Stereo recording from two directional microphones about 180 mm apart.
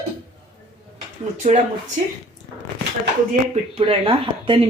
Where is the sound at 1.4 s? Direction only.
45° right (ahead or behind).